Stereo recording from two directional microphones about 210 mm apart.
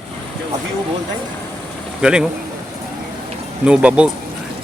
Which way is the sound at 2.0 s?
5° right (ahead or behind).